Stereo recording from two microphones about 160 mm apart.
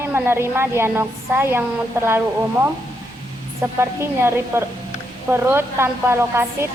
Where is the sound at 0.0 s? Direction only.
15° right (ahead or behind).